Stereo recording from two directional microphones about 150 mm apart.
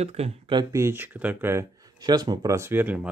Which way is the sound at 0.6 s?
20° right (ahead or behind).